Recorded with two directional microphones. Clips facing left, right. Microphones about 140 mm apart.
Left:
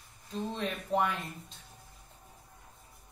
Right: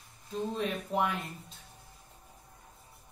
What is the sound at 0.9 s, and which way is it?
Speech, 30° left (ahead or behind).